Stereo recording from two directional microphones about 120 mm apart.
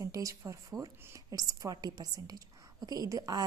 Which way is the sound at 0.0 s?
30° right (ahead or behind).